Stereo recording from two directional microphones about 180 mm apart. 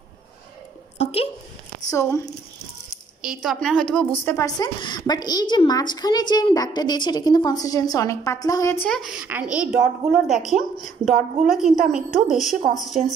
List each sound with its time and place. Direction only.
0.9 s a sound: 35° left (ahead or behind)
1.9 s a woman's voice: 15° left (ahead or behind)
3.2 s a woman's voice: 5° right (ahead or behind); by 4.5 s 15° left (ahead or behind)
4.6 s a woman's voice: 25° left (ahead or behind); by 13.0 s centre (ahead or behind)